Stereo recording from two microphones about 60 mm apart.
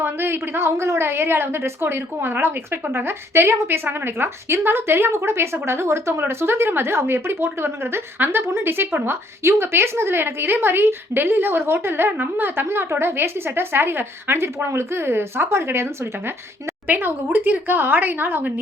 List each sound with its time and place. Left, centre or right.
0.0 s a woman's voice: right
16.8 s a woman's voice: right